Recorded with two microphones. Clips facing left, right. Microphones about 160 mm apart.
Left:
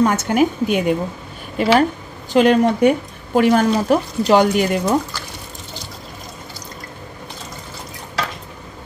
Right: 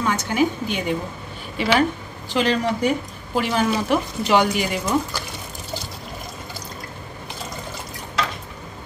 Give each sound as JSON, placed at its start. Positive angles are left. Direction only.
{"t": 0.0, "sound": "speech", "side_deg": 50}